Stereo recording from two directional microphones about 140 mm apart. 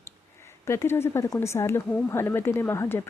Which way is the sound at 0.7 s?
20° left (ahead or behind).